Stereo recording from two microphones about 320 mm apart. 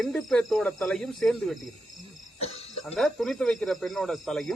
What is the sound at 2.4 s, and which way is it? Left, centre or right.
Cough, centre.